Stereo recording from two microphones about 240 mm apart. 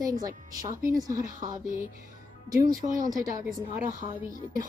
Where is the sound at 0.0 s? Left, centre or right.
Centre.